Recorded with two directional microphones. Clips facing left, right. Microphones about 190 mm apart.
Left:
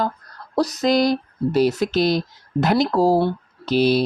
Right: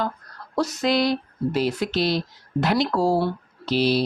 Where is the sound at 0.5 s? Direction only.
35° left (ahead or behind).